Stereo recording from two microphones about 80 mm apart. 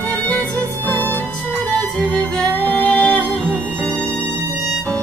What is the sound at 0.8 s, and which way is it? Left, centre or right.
Music, left.